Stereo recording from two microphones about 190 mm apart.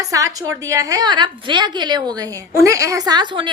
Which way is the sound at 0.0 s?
15° right (ahead or behind).